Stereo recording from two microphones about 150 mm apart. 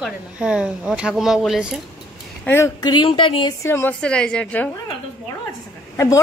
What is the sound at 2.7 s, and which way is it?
Speech, 30° left (ahead or behind).